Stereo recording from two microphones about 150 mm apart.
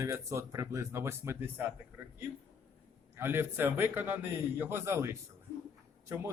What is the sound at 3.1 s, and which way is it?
A man's voice, 15° right (ahead or behind).